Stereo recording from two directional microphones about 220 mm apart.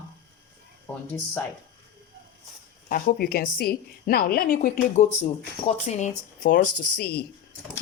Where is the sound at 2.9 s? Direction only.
45° left (ahead or behind).